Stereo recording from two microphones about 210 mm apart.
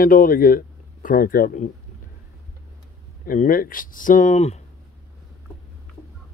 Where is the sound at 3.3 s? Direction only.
40° left (ahead or behind).